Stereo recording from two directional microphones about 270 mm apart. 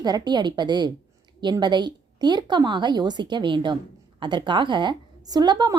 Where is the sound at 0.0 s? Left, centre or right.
Centre.